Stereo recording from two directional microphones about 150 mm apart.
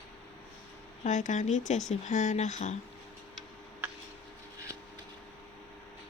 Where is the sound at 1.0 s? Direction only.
55° left (ahead or behind).